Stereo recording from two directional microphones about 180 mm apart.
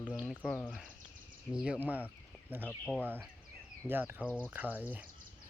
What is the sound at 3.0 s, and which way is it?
Speech, 10° right (ahead or behind).